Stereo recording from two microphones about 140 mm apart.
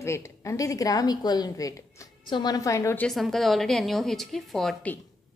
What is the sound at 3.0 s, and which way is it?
A woman's voice, centre (ahead or behind).